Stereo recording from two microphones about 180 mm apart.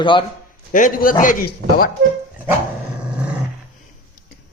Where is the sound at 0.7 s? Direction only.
50° left (ahead or behind).